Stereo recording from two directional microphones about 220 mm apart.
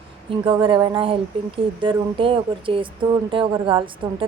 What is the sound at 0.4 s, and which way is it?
A woman's voice, 20° right (ahead or behind).